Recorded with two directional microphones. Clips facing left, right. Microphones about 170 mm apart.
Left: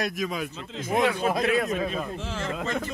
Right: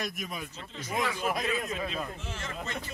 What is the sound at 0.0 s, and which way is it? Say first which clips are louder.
Speech: left 8 dB; 90° left.